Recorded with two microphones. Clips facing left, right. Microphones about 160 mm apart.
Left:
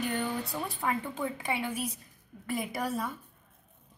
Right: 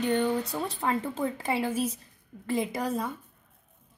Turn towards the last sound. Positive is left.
turn(degrees=-20)  # may be behind; listen again after turning